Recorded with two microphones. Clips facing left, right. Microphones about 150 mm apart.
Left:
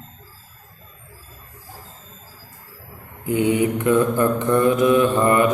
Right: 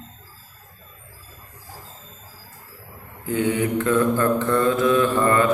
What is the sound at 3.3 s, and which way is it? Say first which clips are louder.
Mantra: left 3 dB; 15° left (ahead or behind).